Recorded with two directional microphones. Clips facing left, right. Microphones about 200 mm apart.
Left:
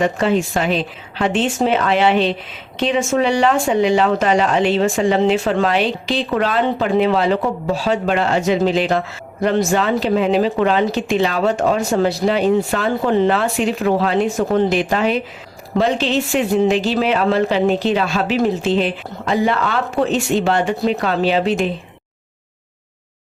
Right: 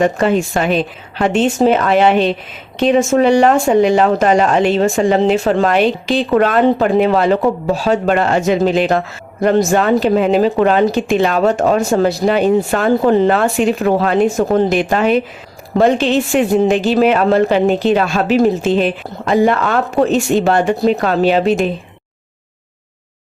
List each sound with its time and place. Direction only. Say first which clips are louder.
0.0 s speech: right 3 dB; 50° right (ahead or behind)